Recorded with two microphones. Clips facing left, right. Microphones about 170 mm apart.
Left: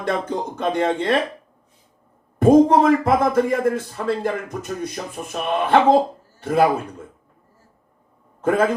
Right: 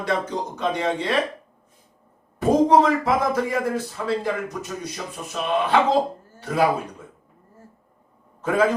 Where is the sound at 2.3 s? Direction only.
50° left (ahead or behind).